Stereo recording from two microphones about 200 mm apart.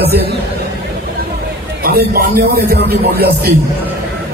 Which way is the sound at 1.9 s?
50° right (ahead or behind).